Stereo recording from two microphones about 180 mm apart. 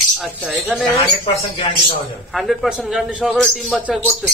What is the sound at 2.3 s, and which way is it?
A man's voice, centre (ahead or behind).